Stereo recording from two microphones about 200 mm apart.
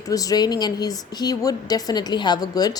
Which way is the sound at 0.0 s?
15° left (ahead or behind).